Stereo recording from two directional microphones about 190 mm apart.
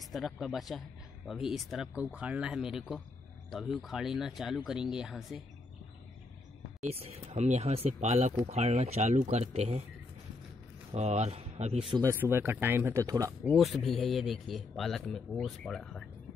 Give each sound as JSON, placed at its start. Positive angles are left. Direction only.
{"t": 0.1, "sound": "speech", "side_deg": 0}
{"t": 6.8, "sound": "speech", "side_deg": -30}
{"t": 10.9, "sound": "speech", "side_deg": -35}
{"t": 11.9, "sound": "speech", "side_deg": -15}
{"t": 13.5, "sound": "speech", "side_deg": 0}